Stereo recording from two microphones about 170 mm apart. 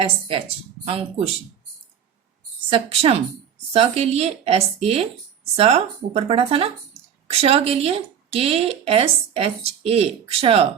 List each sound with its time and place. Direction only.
0.0 s speech: 30° right (ahead or behind)
2.6 s speech: 30° right (ahead or behind)